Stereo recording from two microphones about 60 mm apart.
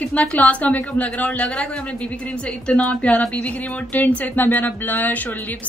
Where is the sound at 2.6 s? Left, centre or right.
Left.